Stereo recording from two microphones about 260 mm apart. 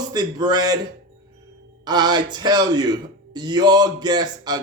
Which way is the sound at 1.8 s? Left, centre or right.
Centre.